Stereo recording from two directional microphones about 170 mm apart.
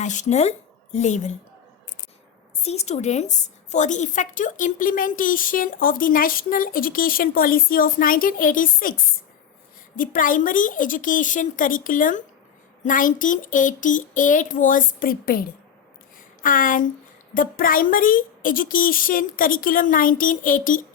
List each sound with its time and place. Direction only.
0.0 s a woman's voice: 45° left (ahead or behind)
2.6 s a woman's voice: 40° left (ahead or behind)